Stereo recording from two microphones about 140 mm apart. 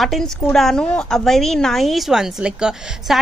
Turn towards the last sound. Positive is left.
turn(degrees=-5)  # may be behind; listen again after turning